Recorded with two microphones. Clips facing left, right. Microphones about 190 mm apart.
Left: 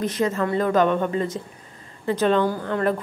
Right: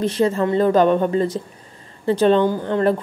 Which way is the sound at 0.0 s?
30° right (ahead or behind).